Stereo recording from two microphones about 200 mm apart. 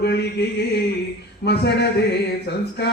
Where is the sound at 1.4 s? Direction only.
55° left (ahead or behind).